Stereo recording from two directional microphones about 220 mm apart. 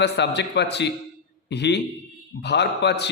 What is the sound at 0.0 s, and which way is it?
Speech, 50° left (ahead or behind).